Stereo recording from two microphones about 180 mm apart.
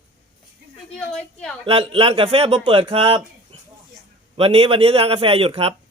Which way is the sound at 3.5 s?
30° right (ahead or behind).